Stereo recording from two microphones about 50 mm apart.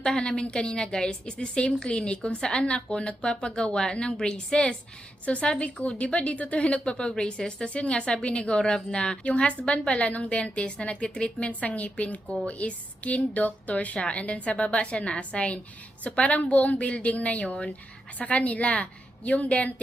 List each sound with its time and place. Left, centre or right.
0.0 s a woman's voice: centre